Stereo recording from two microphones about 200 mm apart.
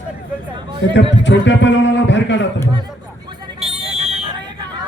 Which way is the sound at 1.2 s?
65° left (ahead or behind).